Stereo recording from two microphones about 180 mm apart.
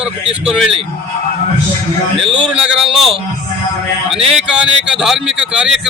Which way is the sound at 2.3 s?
5° right (ahead or behind).